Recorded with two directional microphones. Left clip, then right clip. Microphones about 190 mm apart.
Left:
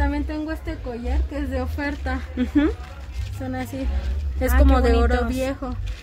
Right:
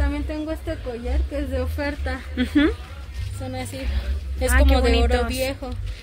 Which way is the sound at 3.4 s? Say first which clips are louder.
Left 2 dB; 45° left (ahead or behind).